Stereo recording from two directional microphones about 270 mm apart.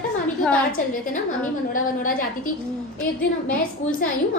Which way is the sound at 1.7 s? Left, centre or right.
Left.